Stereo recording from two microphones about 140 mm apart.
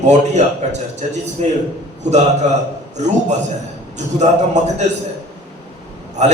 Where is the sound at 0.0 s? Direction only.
55° right (ahead or behind).